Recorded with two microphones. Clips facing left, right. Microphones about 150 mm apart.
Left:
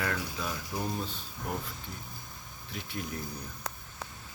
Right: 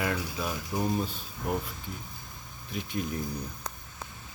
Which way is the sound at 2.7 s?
20° right (ahead or behind).